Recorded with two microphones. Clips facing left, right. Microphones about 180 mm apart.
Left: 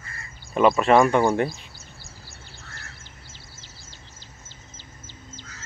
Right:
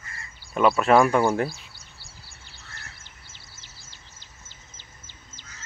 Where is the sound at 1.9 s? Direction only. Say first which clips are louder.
Left 5 dB; 40° left (ahead or behind).